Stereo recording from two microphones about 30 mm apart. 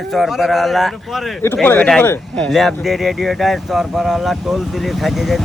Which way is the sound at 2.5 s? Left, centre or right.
Centre.